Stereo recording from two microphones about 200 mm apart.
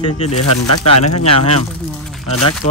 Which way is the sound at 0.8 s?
30° left (ahead or behind).